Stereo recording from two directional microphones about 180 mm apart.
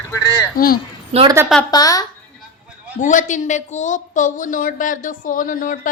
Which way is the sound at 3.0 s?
45° left (ahead or behind).